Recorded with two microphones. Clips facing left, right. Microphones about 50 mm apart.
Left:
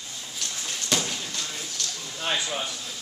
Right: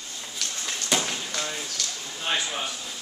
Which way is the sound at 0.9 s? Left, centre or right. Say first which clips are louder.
Right 1 dB; centre.